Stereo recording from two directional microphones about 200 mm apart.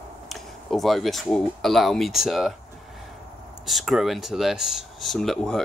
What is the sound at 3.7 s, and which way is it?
Speech, centre (ahead or behind).